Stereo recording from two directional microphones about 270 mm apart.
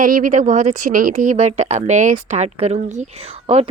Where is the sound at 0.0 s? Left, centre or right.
Right.